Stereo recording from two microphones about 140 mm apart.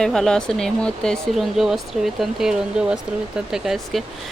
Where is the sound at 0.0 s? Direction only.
5° left (ahead or behind).